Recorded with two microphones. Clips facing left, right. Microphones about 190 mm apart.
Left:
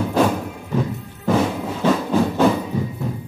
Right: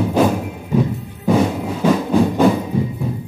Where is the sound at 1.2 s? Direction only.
15° right (ahead or behind).